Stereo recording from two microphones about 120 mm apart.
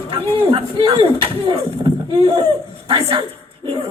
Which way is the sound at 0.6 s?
45° right (ahead or behind).